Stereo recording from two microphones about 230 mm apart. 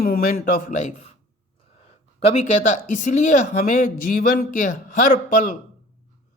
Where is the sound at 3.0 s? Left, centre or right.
Left.